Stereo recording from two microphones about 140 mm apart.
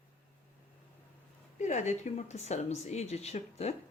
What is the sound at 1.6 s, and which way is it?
Speech, 55° left (ahead or behind).